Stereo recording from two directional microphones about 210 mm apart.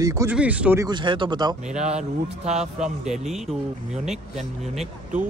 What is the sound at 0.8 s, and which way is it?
Speech, 20° right (ahead or behind).